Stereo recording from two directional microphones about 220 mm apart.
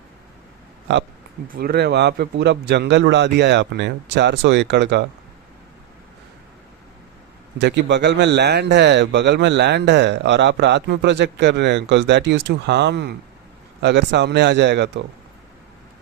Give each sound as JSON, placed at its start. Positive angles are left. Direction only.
{"t": 1.5, "sound": "speech", "side_deg": -45}
{"t": 7.6, "sound": "speech", "side_deg": -50}